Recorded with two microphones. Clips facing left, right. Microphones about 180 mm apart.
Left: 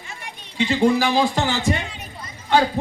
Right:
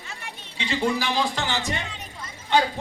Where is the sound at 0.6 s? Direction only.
50° left (ahead or behind).